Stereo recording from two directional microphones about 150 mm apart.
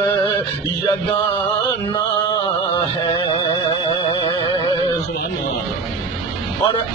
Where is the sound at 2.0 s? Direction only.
30° left (ahead or behind).